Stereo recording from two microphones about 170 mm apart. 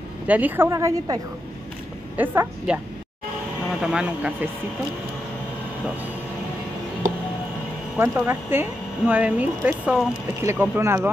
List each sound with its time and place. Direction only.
0.3 s speech: 10° right (ahead or behind)
2.1 s speech: 10° right (ahead or behind)
3.8 s speech: 5° right (ahead or behind)
8.0 s speech: 15° right (ahead or behind)